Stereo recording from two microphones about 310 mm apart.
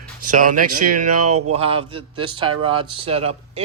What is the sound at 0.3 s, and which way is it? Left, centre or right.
Speech, right.